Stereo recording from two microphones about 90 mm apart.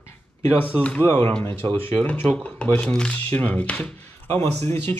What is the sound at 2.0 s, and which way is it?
Speech, 15° left (ahead or behind).